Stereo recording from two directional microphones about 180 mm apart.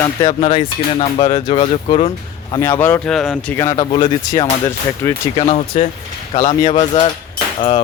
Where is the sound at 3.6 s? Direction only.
15° left (ahead or behind).